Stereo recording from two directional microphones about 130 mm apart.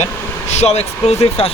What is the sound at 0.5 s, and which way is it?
Speech, 55° left (ahead or behind).